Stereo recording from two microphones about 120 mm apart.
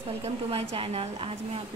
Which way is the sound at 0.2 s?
55° right (ahead or behind).